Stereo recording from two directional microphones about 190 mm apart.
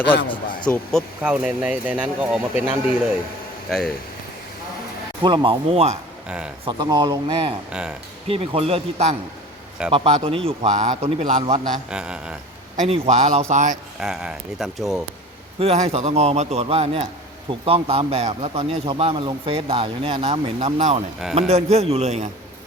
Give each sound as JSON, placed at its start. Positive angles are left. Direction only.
{"t": 0.7, "sound": "speech", "side_deg": 5}
{"t": 1.2, "sound": "speech", "side_deg": -5}
{"t": 3.7, "sound": "speech", "side_deg": 0}
{"t": 5.2, "sound": "speech", "side_deg": -25}
{"t": 6.2, "sound": "speech", "side_deg": -5}
{"t": 6.7, "sound": "speech", "side_deg": -20}
{"t": 7.7, "sound": "speech", "side_deg": -5}
{"t": 8.3, "sound": "speech", "side_deg": -30}
{"t": 9.8, "sound": "speech", "side_deg": -5}
{"t": 10.2, "sound": "speech", "side_deg": -30}
{"t": 11.9, "sound": "speech", "side_deg": -5}
{"t": 12.7, "sound": "speech", "side_deg": -40}
{"t": 14.0, "sound": "speech", "side_deg": -5}
{"t": 15.5, "sound": "speech", "side_deg": -35}